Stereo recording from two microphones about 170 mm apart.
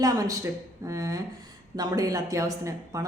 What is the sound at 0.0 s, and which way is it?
Speech, 20° right (ahead or behind).